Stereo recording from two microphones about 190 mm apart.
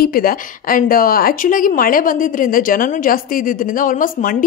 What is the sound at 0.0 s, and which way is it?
Speech, 50° left (ahead or behind).